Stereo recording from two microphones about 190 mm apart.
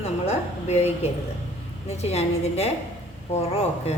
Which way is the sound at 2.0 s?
35° left (ahead or behind).